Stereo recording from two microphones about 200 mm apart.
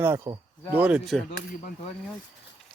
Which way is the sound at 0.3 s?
15° right (ahead or behind).